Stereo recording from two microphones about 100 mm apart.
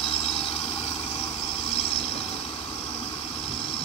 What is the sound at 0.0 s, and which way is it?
Vehicle, 70° left (ahead or behind).